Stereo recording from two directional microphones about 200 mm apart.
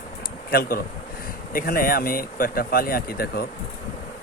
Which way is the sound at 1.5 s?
45° left (ahead or behind).